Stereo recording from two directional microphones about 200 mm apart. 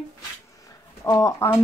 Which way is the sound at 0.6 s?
15° left (ahead or behind).